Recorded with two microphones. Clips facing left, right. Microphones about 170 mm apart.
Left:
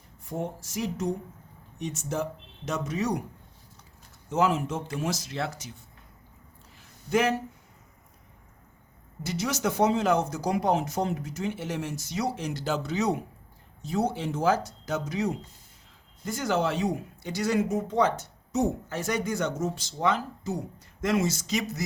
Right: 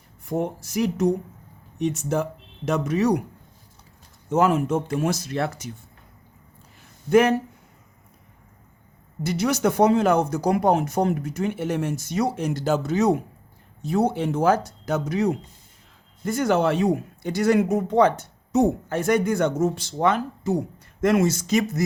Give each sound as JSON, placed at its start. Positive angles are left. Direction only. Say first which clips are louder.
{"t": 0.3, "sound": "speech", "louder": "right 7 dB", "side_deg": -70}
{"t": 4.3, "sound": "speech", "louder": "right 6 dB", "side_deg": -50}
{"t": 7.1, "sound": "speech", "louder": "right 8 dB", "side_deg": -55}
{"t": 9.2, "sound": "speech", "louder": "right 7 dB", "side_deg": -60}